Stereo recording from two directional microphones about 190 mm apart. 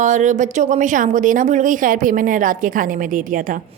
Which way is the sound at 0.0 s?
40° right (ahead or behind).